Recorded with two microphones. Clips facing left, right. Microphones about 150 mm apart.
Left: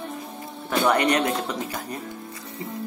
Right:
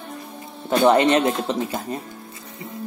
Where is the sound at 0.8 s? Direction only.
25° right (ahead or behind).